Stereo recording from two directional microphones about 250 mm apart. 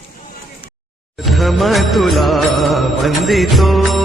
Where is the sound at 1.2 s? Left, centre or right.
Centre.